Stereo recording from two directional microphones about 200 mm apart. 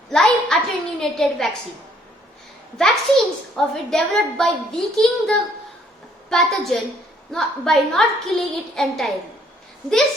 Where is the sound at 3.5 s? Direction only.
Centre (ahead or behind).